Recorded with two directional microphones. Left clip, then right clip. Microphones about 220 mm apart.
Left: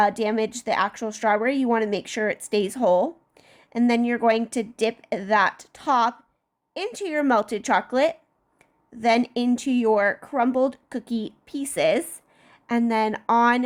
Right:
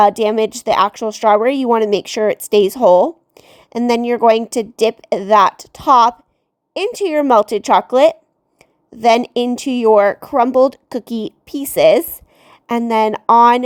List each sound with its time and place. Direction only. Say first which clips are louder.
0.0 s speech: right 9 dB; 30° right (ahead or behind)
8.5 s a sound: right 6 dB; 30° right (ahead or behind)
9.3 s speech: right 6 dB; 25° right (ahead or behind)